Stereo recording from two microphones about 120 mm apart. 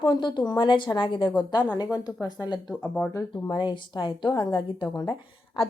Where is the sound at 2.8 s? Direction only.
10° left (ahead or behind).